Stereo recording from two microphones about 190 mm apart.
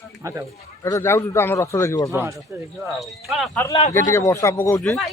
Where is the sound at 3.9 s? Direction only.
15° left (ahead or behind).